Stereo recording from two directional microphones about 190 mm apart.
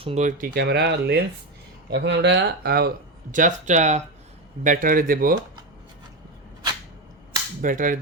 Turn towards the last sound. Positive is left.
turn(degrees=-45)  # may be behind; listen again after turning